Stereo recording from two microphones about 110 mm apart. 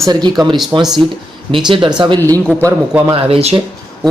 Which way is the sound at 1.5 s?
50° right (ahead or behind).